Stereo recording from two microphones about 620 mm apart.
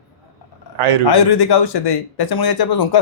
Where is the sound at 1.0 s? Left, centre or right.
Left.